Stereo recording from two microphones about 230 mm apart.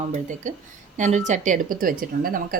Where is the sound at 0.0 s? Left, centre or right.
Right.